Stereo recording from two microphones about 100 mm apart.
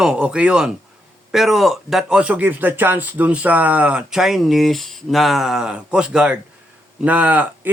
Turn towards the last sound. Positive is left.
turn(degrees=-15)  # may be behind; listen again after turning